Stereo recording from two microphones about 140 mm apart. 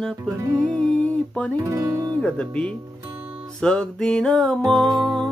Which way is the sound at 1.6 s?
20° right (ahead or behind).